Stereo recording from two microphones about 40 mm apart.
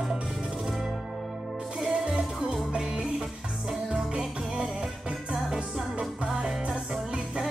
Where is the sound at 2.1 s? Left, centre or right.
Right.